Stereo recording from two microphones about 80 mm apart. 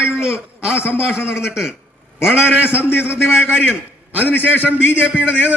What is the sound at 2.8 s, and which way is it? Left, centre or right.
A man's voice, left.